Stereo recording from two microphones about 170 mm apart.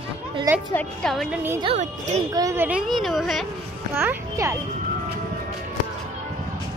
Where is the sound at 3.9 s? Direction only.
15° right (ahead or behind).